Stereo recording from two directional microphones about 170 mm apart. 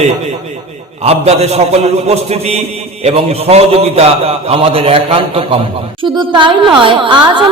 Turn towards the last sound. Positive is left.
turn(degrees=-25)  # may be behind; listen again after turning